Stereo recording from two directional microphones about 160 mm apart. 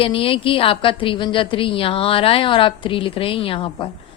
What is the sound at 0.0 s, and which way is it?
A woman's voice, 35° left (ahead or behind).